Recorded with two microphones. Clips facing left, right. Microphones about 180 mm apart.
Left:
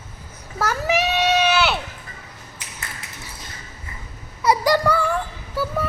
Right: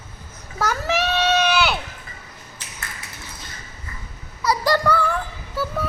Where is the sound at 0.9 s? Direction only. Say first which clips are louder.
Left 1 dB; 15° left (ahead or behind).